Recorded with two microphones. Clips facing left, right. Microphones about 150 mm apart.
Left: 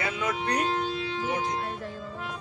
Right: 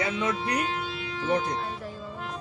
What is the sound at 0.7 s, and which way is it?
Music, 40° left (ahead or behind).